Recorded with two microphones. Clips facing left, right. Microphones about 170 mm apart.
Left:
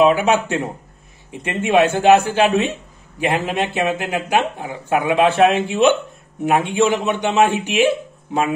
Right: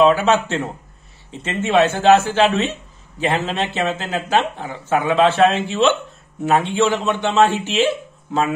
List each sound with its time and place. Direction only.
0.0 s speech: 15° left (ahead or behind)